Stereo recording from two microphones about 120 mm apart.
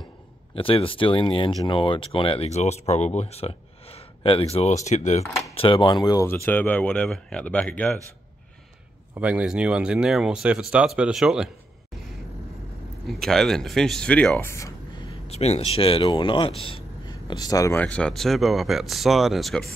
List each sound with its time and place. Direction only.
0.6 s speech: 50° left (ahead or behind)
4.8 s speech: 75° left (ahead or behind)
5.5 s speech: 50° left (ahead or behind)
6.2 s speech: 20° left (ahead or behind)
9.1 s speech: 10° right (ahead or behind)
13.1 s speech: 5° left (ahead or behind)
15.2 s speech: 60° left (ahead or behind)
17.0 s a sound: 35° left (ahead or behind)
17.7 s speech: 10° left (ahead or behind)